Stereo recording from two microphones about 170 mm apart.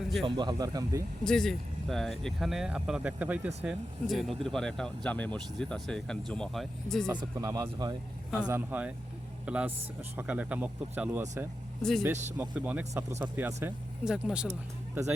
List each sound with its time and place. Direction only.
0.3 s speech: 25° right (ahead or behind)
1.2 s speech: 5° left (ahead or behind)
7.1 s speech: 25° right (ahead or behind)
8.4 s speech: 10° right (ahead or behind)
11.8 s speech: 5° left (ahead or behind)
12.4 s speech: 10° right (ahead or behind)